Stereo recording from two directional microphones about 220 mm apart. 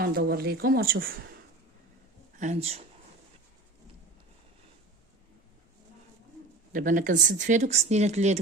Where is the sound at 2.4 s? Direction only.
30° right (ahead or behind).